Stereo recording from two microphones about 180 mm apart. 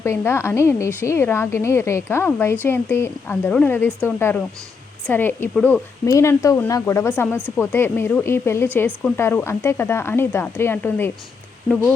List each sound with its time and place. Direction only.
0.0 s speech: 15° left (ahead or behind)
6.1 s speech: 15° left (ahead or behind)